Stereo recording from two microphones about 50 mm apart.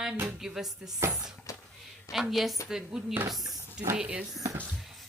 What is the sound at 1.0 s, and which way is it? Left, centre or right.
Speech, right.